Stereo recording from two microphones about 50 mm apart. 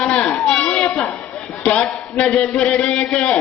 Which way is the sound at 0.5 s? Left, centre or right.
Left.